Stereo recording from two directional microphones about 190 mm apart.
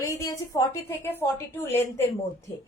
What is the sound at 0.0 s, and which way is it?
A woman's voice, 15° left (ahead or behind).